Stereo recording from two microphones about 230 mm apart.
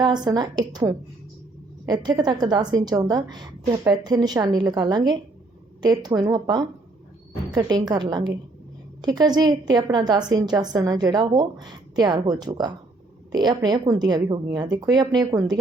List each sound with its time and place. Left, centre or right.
0.0 s a woman's voice: centre